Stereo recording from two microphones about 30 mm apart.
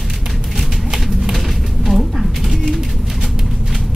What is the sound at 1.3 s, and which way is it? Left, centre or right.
Pigeon, centre.